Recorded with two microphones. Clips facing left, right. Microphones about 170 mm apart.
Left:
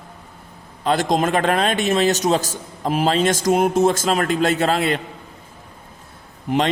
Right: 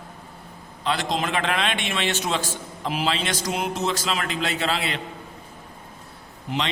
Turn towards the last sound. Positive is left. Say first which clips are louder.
# left 8 dB
turn(degrees=50)  # may be behind; listen again after turning